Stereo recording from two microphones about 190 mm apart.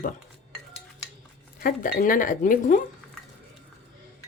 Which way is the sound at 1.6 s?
45° left (ahead or behind).